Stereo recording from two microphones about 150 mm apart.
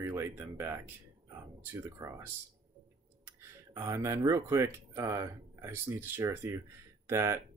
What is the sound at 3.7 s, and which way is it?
Speech, 20° right (ahead or behind).